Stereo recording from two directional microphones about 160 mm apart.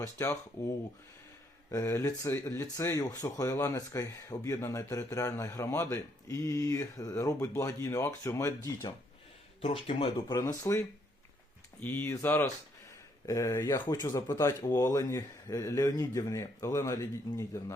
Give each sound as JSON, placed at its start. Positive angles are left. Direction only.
{"t": 0.0, "sound": "speech", "side_deg": 20}
{"t": 1.7, "sound": "speech", "side_deg": 20}
{"t": 9.6, "sound": "speech", "side_deg": 40}
{"t": 10.3, "sound": "speech", "side_deg": 20}